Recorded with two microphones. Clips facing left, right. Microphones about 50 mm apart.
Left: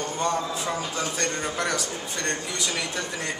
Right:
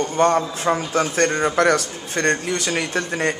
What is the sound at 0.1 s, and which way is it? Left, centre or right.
A man's voice, right.